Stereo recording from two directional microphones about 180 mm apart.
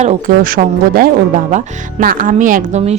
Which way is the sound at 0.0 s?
45° right (ahead or behind).